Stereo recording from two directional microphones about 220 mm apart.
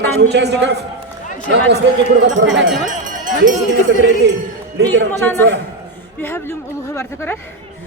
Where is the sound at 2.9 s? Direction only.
35° right (ahead or behind).